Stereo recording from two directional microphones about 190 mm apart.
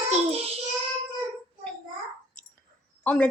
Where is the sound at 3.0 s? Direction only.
5° left (ahead or behind).